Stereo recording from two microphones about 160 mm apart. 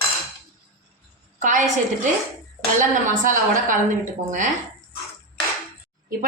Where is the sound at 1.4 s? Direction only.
50° right (ahead or behind).